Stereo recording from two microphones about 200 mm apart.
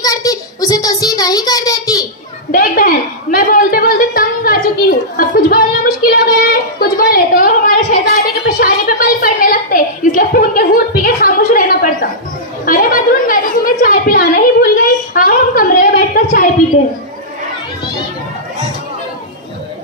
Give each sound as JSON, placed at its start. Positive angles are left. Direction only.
{"t": 0.0, "sound": "child singing", "side_deg": 20}
{"t": 2.5, "sound": "a woman's voice", "side_deg": 45}
{"t": 13.8, "sound": "a sound", "side_deg": 45}